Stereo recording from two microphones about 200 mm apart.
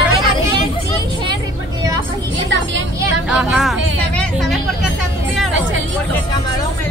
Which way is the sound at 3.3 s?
5° right (ahead or behind).